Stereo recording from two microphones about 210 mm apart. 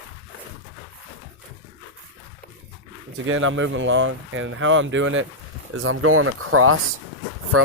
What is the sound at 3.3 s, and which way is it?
Speech, 70° right (ahead or behind).